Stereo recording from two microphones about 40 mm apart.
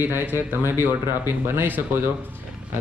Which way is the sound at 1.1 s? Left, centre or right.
Right.